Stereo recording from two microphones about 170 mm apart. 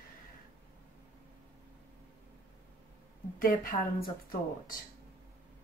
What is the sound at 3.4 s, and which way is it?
A woman's voice, 55° left (ahead or behind).